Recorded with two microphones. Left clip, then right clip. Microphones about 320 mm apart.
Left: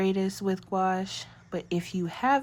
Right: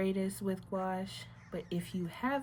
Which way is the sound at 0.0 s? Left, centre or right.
Left.